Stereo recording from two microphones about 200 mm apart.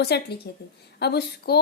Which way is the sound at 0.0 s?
55° left (ahead or behind).